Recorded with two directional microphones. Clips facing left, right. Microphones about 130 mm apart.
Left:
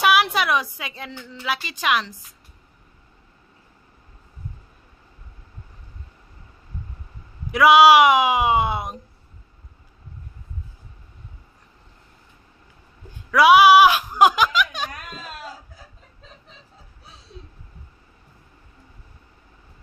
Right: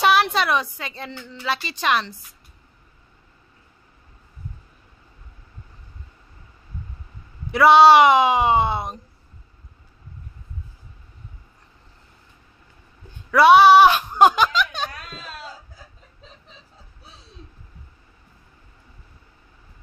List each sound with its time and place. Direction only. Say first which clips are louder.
0.0 s a sound: right 1 dB; 5° left (ahead or behind)
0.7 s a woman's voice: right 1 dB; 5° left (ahead or behind)
7.5 s speech: right 1 dB; 5° left (ahead or behind)
13.3 s speech: right 1 dB; 5° left (ahead or behind)